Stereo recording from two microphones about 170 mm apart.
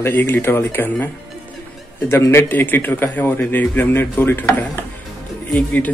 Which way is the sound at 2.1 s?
15° left (ahead or behind).